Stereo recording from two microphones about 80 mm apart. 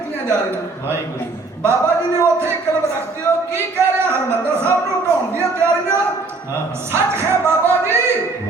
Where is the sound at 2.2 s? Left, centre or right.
Right.